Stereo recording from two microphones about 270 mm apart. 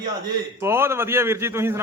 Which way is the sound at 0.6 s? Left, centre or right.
Centre.